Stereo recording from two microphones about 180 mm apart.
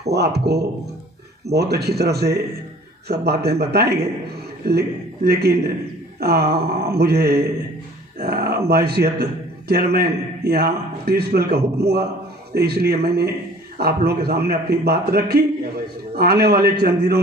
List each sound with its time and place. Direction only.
0.0 s a man's voice: 65° right (ahead or behind)